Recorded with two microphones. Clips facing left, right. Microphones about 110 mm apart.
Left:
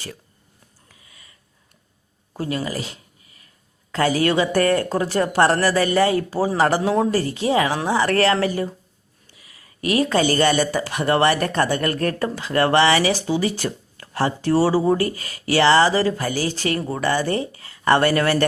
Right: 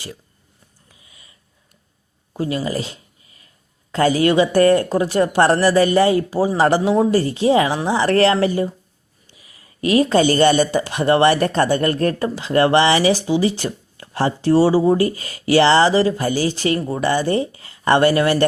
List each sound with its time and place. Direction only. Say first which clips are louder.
2.3 s speech: right 3 dB; 20° right (ahead or behind)